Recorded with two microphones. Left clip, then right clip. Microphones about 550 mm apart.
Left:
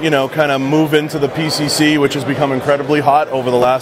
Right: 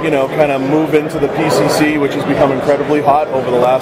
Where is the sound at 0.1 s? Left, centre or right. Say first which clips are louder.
Right 3 dB; left.